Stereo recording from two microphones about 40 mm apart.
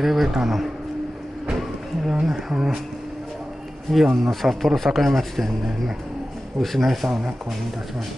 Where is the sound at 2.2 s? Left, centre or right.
Centre.